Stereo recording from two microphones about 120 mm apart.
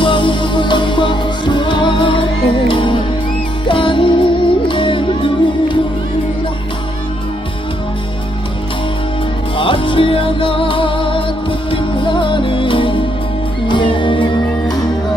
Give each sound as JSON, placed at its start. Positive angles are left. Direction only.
{"t": 0.0, "sound": "music", "side_deg": 45}
{"t": 9.6, "sound": "music", "side_deg": 45}